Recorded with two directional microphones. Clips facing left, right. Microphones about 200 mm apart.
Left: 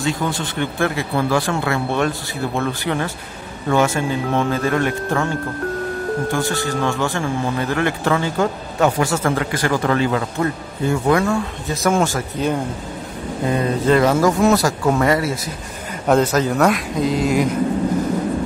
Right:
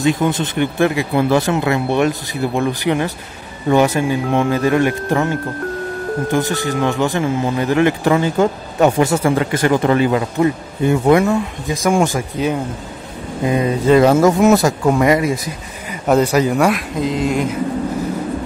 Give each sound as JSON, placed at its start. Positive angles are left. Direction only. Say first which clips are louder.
{"t": 0.0, "sound": "speech", "louder": "right 6 dB", "side_deg": -20}
{"t": 6.3, "sound": "speech", "louder": "right 3 dB", "side_deg": -15}
{"t": 14.0, "sound": "speech", "louder": "right 4 dB", "side_deg": -25}